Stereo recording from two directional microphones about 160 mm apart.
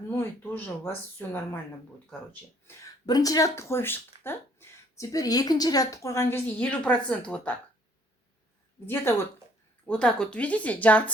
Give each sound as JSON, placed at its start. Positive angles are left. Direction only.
{"t": 0.1, "sound": "speech", "side_deg": 15}
{"t": 2.6, "sound": "speech", "side_deg": 20}
{"t": 8.9, "sound": "speech", "side_deg": 15}